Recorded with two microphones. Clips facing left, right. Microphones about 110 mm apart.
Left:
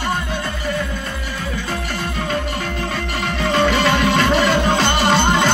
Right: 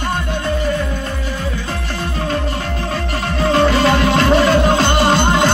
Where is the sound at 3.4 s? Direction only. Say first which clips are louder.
Right 3 dB; centre (ahead or behind).